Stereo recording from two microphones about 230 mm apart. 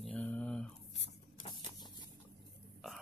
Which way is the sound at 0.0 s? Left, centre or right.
Centre.